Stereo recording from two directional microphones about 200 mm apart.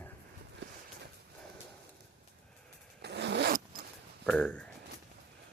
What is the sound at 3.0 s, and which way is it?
Zipper, 60° right (ahead or behind).